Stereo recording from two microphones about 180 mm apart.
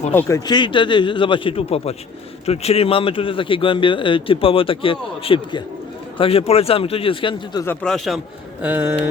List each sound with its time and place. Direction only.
0.1 s a man's voice: 15° left (ahead or behind)
7.6 s speech: 10° left (ahead or behind)
8.6 s speech: 10° right (ahead or behind)